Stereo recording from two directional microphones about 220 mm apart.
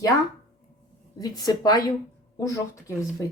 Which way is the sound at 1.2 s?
15° left (ahead or behind).